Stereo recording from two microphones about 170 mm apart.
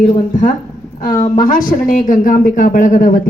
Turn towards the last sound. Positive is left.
turn(degrees=50)  # may be behind; listen again after turning